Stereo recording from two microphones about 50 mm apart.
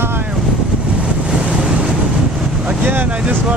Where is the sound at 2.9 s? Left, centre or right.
Right.